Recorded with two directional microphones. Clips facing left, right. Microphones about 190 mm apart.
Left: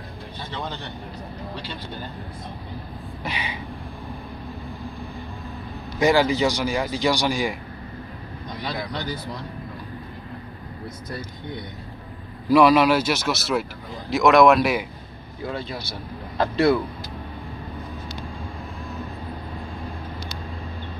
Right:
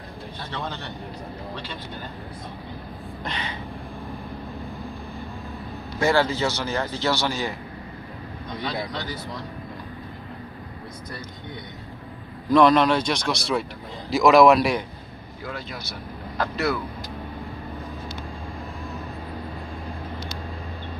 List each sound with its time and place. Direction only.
0.5 s speech: centre (ahead or behind)
3.3 s speech: 10° left (ahead or behind)
5.9 s speech: 15° left (ahead or behind)
12.4 s speech: 5° left (ahead or behind)
15.4 s speech: 30° left (ahead or behind)